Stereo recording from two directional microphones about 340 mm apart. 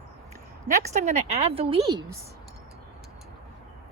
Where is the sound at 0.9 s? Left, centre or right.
Centre.